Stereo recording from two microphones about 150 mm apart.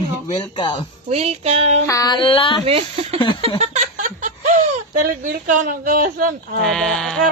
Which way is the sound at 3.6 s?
55° right (ahead or behind).